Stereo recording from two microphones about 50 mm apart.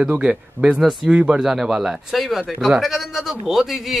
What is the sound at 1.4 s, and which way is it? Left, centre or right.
A man's voice, centre.